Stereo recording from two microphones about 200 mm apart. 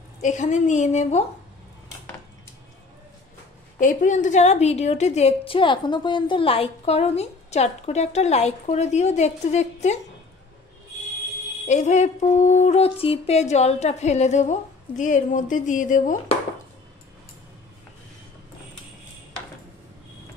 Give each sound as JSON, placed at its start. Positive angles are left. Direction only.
{"t": 0.2, "sound": "a woman's voice", "side_deg": 35}
{"t": 3.8, "sound": "a woman's voice", "side_deg": 40}
{"t": 11.6, "sound": "a woman's voice", "side_deg": 35}